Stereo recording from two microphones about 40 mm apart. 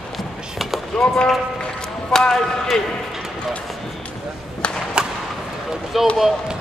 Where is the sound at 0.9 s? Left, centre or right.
Centre.